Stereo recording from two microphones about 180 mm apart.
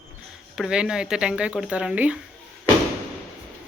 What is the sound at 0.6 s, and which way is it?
Speech, 5° right (ahead or behind).